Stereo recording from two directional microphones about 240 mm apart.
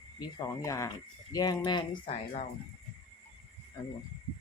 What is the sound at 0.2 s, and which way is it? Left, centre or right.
Speech, centre.